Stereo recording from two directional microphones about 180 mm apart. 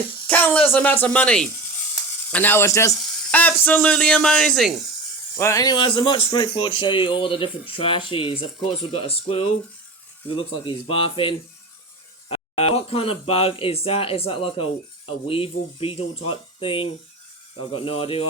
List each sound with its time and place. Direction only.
0.3 s speech: 10° left (ahead or behind)
5.4 s speech: 15° left (ahead or behind)